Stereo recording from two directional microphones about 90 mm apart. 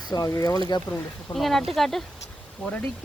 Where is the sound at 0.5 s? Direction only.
55° left (ahead or behind).